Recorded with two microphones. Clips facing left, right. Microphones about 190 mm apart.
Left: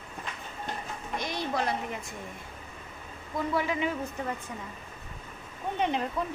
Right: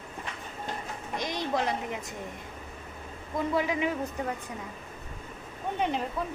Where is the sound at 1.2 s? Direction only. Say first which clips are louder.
Right 2 dB; 15° right (ahead or behind).